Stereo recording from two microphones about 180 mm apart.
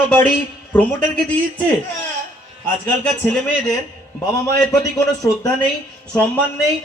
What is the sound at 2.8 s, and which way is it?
Speech, 5° left (ahead or behind).